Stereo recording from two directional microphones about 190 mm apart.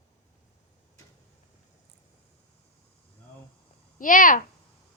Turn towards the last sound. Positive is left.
turn(degrees=45)  # may be behind; listen again after turning